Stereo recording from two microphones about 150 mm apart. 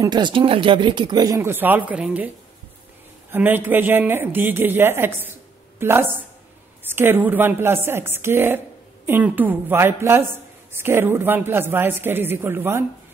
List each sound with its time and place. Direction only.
0.0 s a woman's voice: 30° right (ahead or behind)